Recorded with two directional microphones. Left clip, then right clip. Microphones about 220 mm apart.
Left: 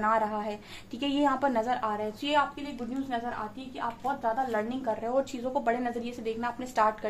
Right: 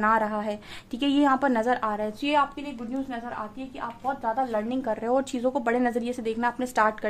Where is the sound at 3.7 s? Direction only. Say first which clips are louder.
Right 1 dB; 35° right (ahead or behind).